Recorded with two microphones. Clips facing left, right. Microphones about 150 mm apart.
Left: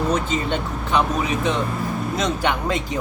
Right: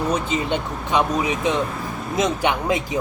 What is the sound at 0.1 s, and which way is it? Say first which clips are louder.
Speech: even; 15° right (ahead or behind).